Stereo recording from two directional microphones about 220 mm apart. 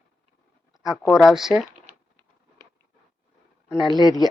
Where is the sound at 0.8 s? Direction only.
Centre (ahead or behind).